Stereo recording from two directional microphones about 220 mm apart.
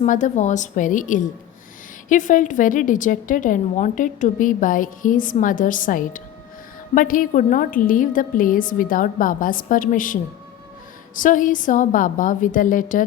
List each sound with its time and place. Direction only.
0.0 s a woman's voice: 35° left (ahead or behind)